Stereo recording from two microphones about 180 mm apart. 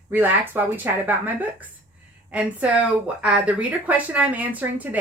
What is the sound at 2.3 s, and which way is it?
Speech, 10° right (ahead or behind).